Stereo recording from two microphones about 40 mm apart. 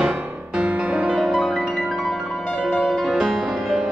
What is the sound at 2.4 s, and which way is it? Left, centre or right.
Music, centre.